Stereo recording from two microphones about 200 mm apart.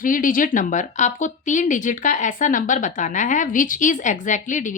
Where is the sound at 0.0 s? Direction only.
40° left (ahead or behind).